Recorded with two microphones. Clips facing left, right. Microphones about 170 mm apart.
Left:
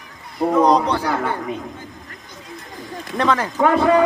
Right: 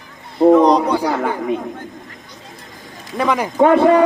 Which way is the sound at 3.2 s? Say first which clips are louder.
Right 1 dB; 15° right (ahead or behind).